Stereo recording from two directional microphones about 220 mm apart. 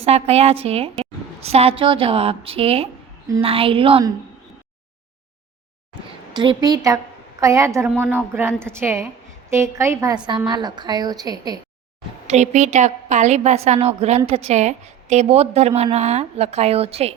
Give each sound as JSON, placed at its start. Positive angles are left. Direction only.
{"t": 0.0, "sound": "a woman's voice", "side_deg": -25}
{"t": 6.3, "sound": "a woman's voice", "side_deg": -20}
{"t": 12.3, "sound": "a woman's voice", "side_deg": -30}